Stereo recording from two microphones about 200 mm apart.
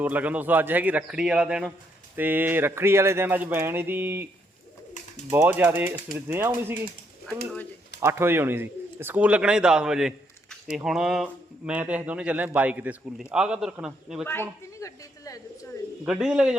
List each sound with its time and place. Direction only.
0.0 s speech: 10° right (ahead or behind)
5.3 s speech: 10° right (ahead or behind)
8.0 s speech: 10° right (ahead or behind)
14.3 s a sound: 15° left (ahead or behind)
16.0 s speech: 5° right (ahead or behind)